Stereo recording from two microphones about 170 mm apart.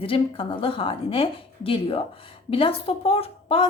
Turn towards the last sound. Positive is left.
turn(degrees=35)  # may be behind; listen again after turning